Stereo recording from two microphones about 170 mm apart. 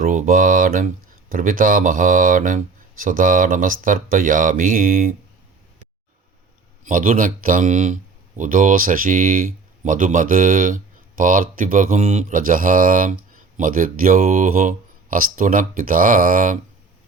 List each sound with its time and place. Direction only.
0.0 s speech: 50° right (ahead or behind)
6.8 s speech: 50° right (ahead or behind)